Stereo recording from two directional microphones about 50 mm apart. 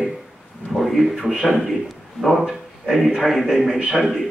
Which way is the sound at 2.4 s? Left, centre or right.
Centre.